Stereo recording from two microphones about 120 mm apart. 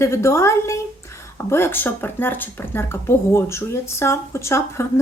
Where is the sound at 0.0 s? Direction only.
20° left (ahead or behind).